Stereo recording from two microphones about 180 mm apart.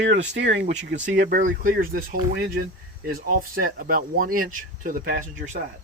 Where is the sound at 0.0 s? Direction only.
80° right.